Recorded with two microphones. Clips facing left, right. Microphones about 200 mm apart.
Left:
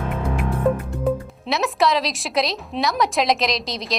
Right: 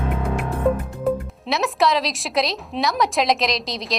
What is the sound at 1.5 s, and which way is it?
A woman's voice, centre (ahead or behind).